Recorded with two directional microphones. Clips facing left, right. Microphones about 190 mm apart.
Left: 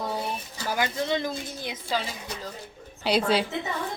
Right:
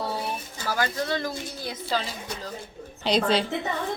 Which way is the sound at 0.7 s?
20° left (ahead or behind).